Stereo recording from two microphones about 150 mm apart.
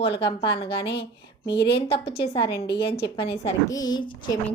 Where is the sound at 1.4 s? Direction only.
90° left.